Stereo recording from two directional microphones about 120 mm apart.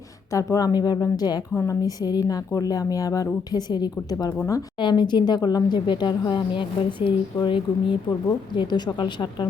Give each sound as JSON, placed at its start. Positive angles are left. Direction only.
{"t": 0.3, "sound": "a woman's voice", "side_deg": 25}